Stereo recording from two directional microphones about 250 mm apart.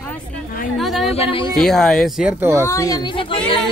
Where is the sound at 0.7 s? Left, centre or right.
Centre.